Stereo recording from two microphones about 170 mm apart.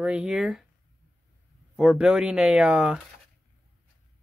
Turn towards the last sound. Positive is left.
turn(degrees=-5)  # may be behind; listen again after turning